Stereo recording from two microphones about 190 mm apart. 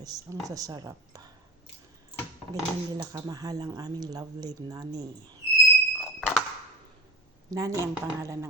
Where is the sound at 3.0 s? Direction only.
20° right (ahead or behind).